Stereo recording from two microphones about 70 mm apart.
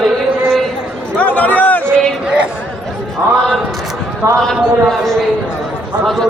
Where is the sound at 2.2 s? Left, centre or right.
Centre.